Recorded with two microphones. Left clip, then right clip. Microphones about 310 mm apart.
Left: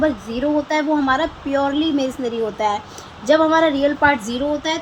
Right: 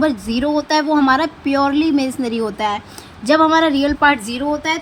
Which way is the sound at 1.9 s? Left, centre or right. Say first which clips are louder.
Right 2 dB; right.